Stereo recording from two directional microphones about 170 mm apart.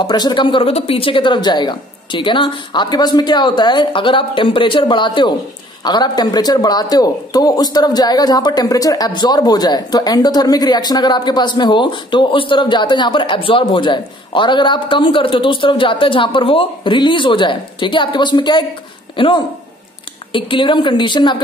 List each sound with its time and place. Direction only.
0.0 s a man's voice: 25° left (ahead or behind)